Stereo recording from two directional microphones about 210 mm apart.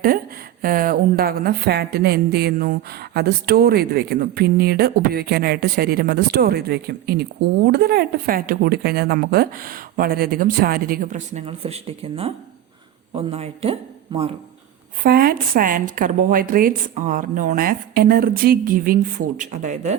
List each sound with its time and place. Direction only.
0.6 s a man's voice: 40° right (ahead or behind)
15.0 s speech: 45° right (ahead or behind)